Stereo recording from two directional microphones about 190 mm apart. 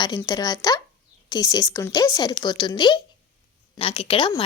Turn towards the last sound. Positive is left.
turn(degrees=30)  # may be behind; listen again after turning